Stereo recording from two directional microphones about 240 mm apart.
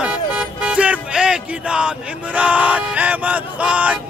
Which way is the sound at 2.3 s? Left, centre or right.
Centre.